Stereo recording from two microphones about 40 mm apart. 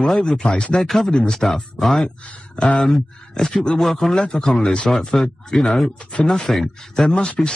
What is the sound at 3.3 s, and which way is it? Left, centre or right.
Speech, centre.